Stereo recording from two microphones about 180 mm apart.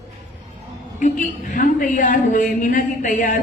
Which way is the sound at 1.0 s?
45° left (ahead or behind).